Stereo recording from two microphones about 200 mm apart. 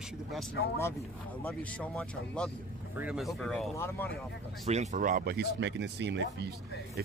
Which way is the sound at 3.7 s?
10° left (ahead or behind).